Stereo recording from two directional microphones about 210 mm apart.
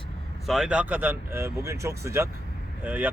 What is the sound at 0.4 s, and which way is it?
Speech, centre (ahead or behind).